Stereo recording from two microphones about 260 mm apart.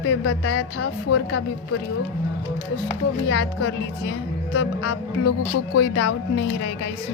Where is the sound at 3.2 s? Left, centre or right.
Left.